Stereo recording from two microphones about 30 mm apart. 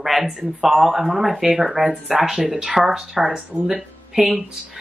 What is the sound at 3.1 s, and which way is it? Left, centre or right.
Speech, right.